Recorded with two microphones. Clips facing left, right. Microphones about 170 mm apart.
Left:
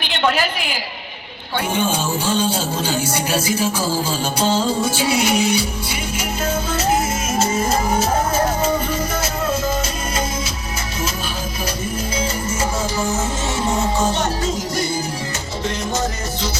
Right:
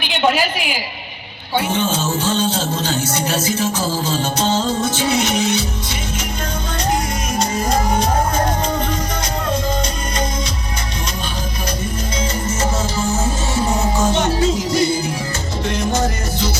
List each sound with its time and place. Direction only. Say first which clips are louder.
1.7 s music: right 1 dB; 10° left (ahead or behind)
13.7 s music: right 1 dB; 35° left (ahead or behind)
14.7 s music: right 6 dB; 50° left (ahead or behind)
15.6 s music: right 3 dB; centre (ahead or behind)